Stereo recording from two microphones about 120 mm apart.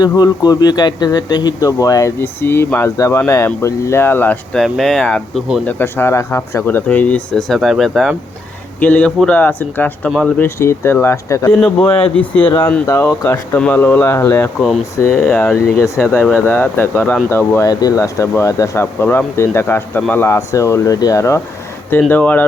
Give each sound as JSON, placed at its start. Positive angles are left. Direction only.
{"t": 0.0, "sound": "speech", "side_deg": 35}
{"t": 4.5, "sound": "speech", "side_deg": 5}
{"t": 5.6, "sound": "speech", "side_deg": 20}
{"t": 8.8, "sound": "speech", "side_deg": 15}
{"t": 11.6, "sound": "speech", "side_deg": 10}
{"t": 11.9, "sound": "speech", "side_deg": 50}
{"t": 12.8, "sound": "speech", "side_deg": 25}
{"t": 14.6, "sound": "speech", "side_deg": 0}
{"t": 14.9, "sound": "speech", "side_deg": 20}
{"t": 15.3, "sound": "speech", "side_deg": 5}
{"t": 15.8, "sound": "speech", "side_deg": 20}
{"t": 17.7, "sound": "speech", "side_deg": 30}
{"t": 22.1, "sound": "speech", "side_deg": 15}